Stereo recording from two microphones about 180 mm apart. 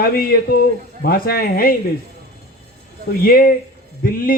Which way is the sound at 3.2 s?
55° left (ahead or behind).